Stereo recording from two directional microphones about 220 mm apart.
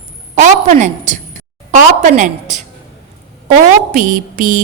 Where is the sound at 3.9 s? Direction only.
35° right (ahead or behind).